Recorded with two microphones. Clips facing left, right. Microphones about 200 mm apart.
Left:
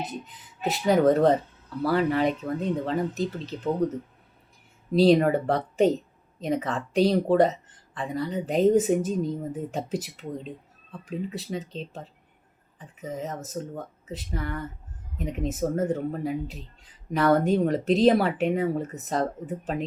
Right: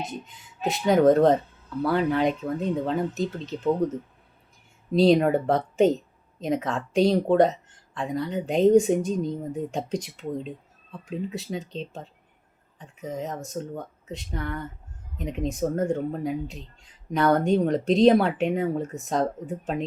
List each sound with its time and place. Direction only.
0.0 s speech: centre (ahead or behind)